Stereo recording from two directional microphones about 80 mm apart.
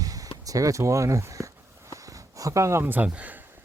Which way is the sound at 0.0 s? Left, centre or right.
Right.